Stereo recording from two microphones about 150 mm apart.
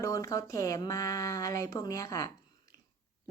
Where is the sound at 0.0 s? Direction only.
20° left (ahead or behind).